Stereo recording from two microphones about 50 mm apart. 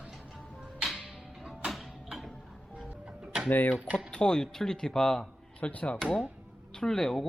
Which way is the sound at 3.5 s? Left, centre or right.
Left.